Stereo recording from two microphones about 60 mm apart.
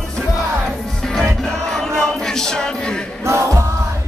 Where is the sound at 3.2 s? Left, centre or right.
Right.